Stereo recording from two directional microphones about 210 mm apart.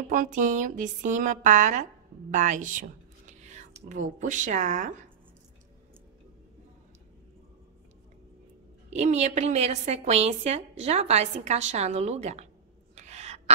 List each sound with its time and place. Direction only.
0.1 s a woman's voice: 40° right (ahead or behind)
8.9 s a woman's voice: 35° right (ahead or behind)
12.9 s a sound: 30° right (ahead or behind)